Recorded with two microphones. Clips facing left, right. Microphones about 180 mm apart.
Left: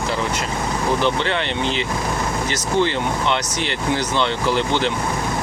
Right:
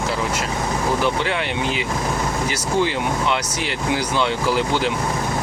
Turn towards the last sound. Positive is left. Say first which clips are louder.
# even
turn(degrees=-5)  # may be behind; listen again after turning